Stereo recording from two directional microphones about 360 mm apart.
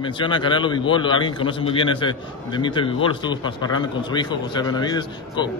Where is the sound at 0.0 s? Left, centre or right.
Centre.